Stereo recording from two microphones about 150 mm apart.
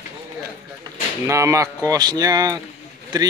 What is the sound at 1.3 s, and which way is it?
A man's voice, 20° right (ahead or behind).